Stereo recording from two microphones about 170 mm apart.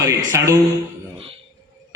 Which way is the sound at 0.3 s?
20° right (ahead or behind).